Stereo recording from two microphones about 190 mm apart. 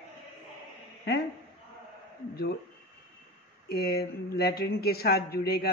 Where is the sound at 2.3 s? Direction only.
55° left (ahead or behind).